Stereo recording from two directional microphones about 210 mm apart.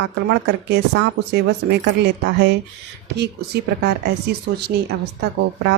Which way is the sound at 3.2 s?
50° right (ahead or behind).